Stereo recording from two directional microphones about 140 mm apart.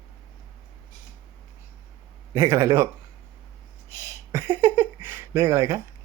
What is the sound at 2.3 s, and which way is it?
Speech, 20° right (ahead or behind).